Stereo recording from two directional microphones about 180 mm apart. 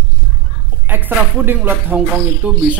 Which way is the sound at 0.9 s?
10° right (ahead or behind).